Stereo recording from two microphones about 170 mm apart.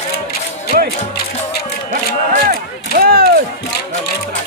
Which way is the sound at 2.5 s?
60° right (ahead or behind).